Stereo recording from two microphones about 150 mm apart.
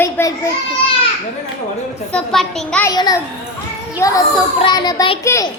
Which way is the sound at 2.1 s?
5° left (ahead or behind).